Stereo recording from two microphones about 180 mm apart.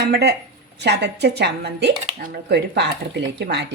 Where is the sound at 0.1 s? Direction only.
65° right (ahead or behind).